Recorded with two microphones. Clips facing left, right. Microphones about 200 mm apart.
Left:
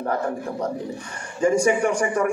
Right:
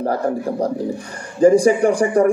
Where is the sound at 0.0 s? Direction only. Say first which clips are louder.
Right 5 dB; 35° right (ahead or behind).